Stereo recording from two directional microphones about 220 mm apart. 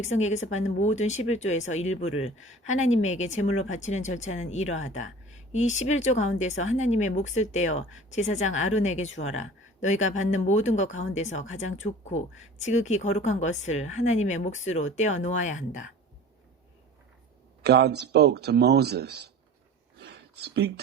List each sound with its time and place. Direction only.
0.0 s speech: 30° left (ahead or behind)
17.6 s speech: 45° right (ahead or behind)
20.0 s a sound: 50° right (ahead or behind)